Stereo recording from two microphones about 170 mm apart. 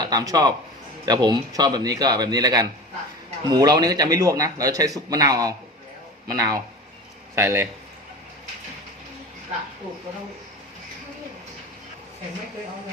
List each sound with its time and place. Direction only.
0.0 s a man's voice: 20° right (ahead or behind)